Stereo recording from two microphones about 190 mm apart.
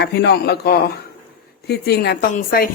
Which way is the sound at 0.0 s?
60° left (ahead or behind).